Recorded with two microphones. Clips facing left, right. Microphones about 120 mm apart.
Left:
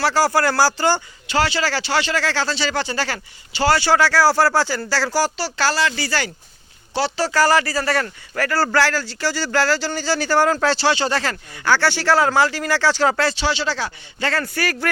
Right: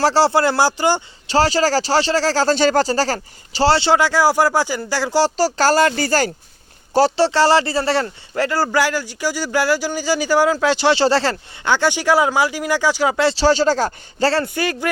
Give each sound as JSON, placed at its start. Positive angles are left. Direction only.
{"t": 0.0, "sound": "speech", "side_deg": -30}
{"t": 1.3, "sound": "speech", "side_deg": -35}
{"t": 5.2, "sound": "speech", "side_deg": -40}
{"t": 7.2, "sound": "speech", "side_deg": -30}
{"t": 10.9, "sound": "speech", "side_deg": -30}
{"t": 13.2, "sound": "speech", "side_deg": -35}
{"t": 14.4, "sound": "speech", "side_deg": -20}